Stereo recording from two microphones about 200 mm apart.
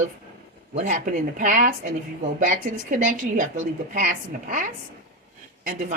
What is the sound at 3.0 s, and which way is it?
A woman's voice, 40° right (ahead or behind).